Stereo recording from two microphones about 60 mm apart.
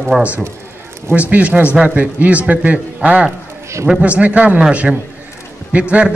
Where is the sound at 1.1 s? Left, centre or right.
Right.